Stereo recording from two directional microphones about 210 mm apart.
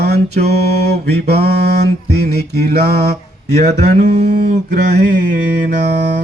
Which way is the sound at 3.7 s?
30° right (ahead or behind).